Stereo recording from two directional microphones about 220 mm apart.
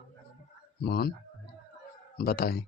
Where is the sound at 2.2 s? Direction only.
45° left (ahead or behind).